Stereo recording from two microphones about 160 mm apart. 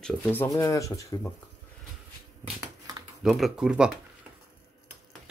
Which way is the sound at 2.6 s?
25° right (ahead or behind).